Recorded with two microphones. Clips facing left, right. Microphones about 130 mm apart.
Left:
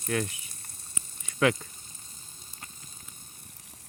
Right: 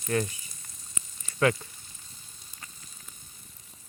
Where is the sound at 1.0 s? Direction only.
20° left (ahead or behind).